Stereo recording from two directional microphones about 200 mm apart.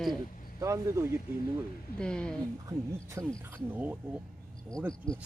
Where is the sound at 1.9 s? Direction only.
5° left (ahead or behind).